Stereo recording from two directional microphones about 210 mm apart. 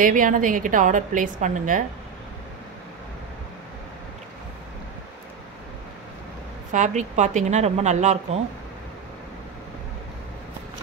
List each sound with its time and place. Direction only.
0.0 s a woman's voice: 40° right (ahead or behind)
6.7 s a woman's voice: 35° right (ahead or behind)